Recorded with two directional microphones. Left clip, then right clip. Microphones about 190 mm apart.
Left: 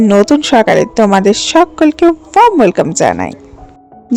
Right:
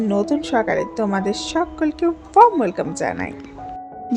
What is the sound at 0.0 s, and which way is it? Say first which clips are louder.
A woman's voice: left 12 dB; 55° left (ahead or behind).